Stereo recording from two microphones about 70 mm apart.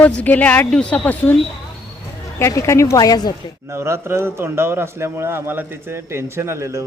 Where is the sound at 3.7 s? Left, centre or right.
Right.